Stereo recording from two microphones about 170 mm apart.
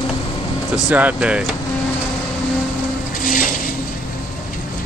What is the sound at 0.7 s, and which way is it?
Speech, 5° right (ahead or behind).